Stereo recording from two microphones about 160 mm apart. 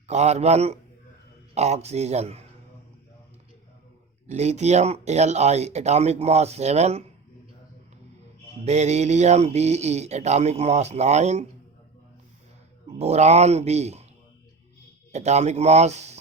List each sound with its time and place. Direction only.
0.1 s speech: 45° right (ahead or behind)
4.3 s speech: 45° right (ahead or behind)
8.6 s speech: 45° right (ahead or behind)
13.0 s speech: 45° right (ahead or behind)
15.1 s speech: 45° right (ahead or behind)